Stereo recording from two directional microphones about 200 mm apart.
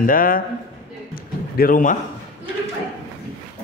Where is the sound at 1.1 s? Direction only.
45° left (ahead or behind).